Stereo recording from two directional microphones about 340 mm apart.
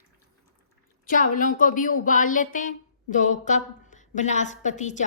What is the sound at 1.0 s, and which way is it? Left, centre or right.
Speech, left.